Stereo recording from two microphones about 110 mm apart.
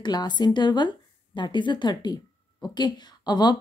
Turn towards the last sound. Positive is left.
turn(degrees=40)  # may be behind; listen again after turning